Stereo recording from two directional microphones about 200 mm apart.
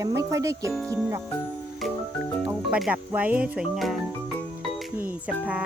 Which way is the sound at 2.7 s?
5° right (ahead or behind).